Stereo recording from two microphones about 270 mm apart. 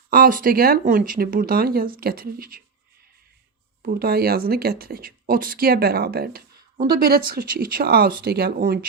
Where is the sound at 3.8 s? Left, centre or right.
Right.